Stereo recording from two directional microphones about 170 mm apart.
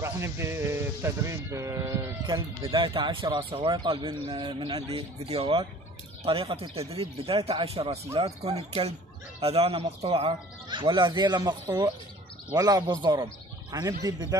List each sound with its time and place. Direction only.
0.0 s speech: 15° right (ahead or behind)
2.7 s a man's voice: 30° right (ahead or behind)